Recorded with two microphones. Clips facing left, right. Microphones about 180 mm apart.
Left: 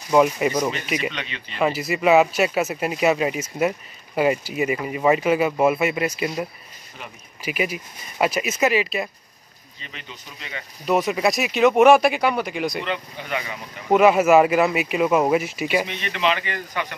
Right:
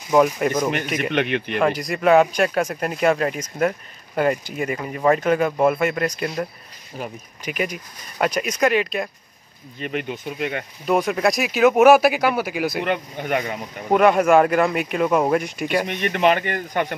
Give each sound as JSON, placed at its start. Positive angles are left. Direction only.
{"t": 0.1, "sound": "speech", "side_deg": 5}
{"t": 0.9, "sound": "speech", "side_deg": -55}
{"t": 1.6, "sound": "speech", "side_deg": 5}
{"t": 7.4, "sound": "speech", "side_deg": 5}
{"t": 9.8, "sound": "speech", "side_deg": -55}
{"t": 10.9, "sound": "speech", "side_deg": 0}
{"t": 12.8, "sound": "speech", "side_deg": -55}
{"t": 13.8, "sound": "speech", "side_deg": 5}
{"t": 15.9, "sound": "speech", "side_deg": -55}